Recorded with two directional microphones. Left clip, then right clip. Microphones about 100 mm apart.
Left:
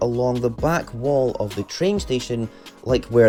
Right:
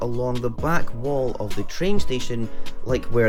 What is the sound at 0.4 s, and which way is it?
Speech, 35° left (ahead or behind).